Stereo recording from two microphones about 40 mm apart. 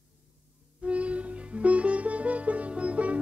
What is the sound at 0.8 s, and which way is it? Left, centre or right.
Sitar, right.